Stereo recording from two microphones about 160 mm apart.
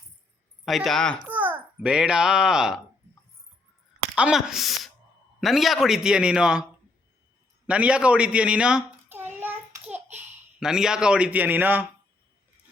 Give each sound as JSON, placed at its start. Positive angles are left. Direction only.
{"t": 0.6, "sound": "a man's voice", "side_deg": 0}
{"t": 1.2, "sound": "a child's voice", "side_deg": -10}
{"t": 4.1, "sound": "a man's voice", "side_deg": -5}
{"t": 7.7, "sound": "a sound", "side_deg": -5}
{"t": 10.6, "sound": "a man's voice", "side_deg": -5}